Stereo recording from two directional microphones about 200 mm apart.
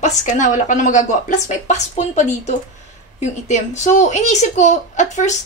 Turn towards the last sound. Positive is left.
turn(degrees=35)  # may be behind; listen again after turning